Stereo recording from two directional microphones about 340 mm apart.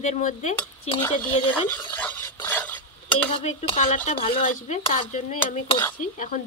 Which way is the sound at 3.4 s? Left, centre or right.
Centre.